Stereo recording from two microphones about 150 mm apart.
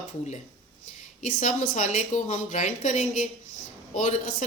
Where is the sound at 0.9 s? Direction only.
55° left (ahead or behind).